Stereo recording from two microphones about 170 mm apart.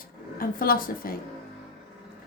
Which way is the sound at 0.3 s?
55° left (ahead or behind).